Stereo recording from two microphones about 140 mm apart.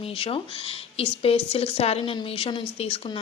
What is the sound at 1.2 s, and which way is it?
A woman's voice, 45° left (ahead or behind).